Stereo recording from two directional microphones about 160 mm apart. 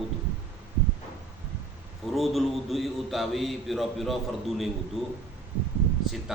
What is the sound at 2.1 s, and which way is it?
A man's voice, centre (ahead or behind).